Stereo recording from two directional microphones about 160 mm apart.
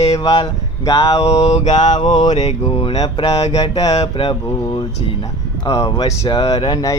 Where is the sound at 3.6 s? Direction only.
25° left (ahead or behind).